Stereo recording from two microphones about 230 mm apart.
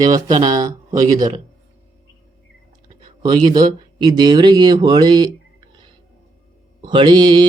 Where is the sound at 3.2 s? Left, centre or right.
Centre.